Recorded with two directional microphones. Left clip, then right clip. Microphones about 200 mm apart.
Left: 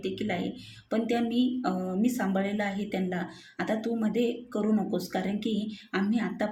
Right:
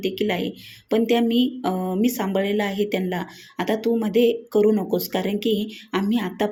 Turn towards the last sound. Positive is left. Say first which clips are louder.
# right 6 dB
turn(degrees=-25)  # may be behind; listen again after turning